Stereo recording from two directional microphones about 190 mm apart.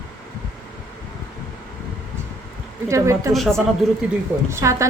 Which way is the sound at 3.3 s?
Centre (ahead or behind).